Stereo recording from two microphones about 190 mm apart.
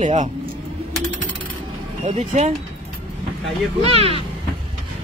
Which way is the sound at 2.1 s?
35° right (ahead or behind).